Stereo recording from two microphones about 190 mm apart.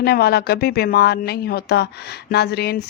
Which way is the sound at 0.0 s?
55° left (ahead or behind).